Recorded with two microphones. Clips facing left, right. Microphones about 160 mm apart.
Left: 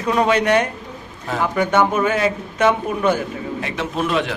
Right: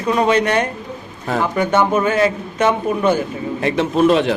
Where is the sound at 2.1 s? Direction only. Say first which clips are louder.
Right 3 dB; 10° left (ahead or behind).